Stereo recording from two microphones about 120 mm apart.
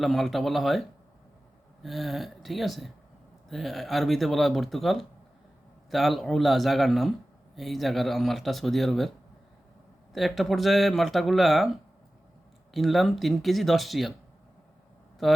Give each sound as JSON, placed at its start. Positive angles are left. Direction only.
{"t": 0.0, "sound": "speech", "side_deg": 0}
{"t": 12.7, "sound": "speech", "side_deg": 0}